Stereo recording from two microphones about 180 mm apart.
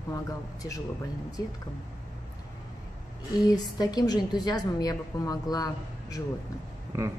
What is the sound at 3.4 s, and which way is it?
Speech, 20° left (ahead or behind).